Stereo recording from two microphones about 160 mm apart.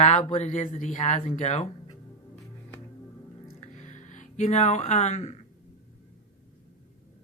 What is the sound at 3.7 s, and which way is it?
Music, 50° left (ahead or behind).